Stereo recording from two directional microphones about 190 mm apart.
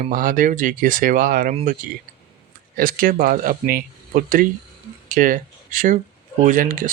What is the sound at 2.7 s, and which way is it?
Speech, 50° right (ahead or behind).